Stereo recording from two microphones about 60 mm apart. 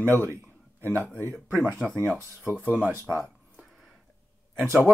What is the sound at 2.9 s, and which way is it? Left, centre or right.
Speech, right.